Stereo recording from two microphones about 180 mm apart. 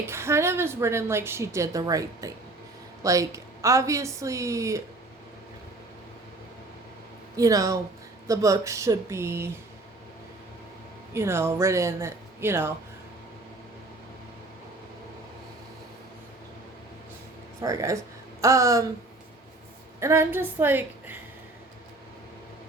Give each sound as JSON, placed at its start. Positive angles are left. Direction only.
{"t": 0.1, "sound": "a woman's voice", "side_deg": -15}
{"t": 7.3, "sound": "a woman's voice", "side_deg": -20}
{"t": 11.1, "sound": "a woman's voice", "side_deg": -15}
{"t": 17.6, "sound": "a woman's voice", "side_deg": -20}
{"t": 20.0, "sound": "a woman's voice", "side_deg": -15}